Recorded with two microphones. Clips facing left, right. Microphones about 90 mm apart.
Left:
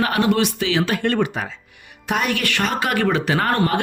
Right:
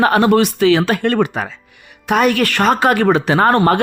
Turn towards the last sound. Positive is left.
turn(degrees=-30)  # may be behind; listen again after turning